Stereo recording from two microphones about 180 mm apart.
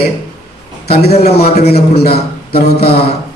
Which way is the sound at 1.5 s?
60° left (ahead or behind).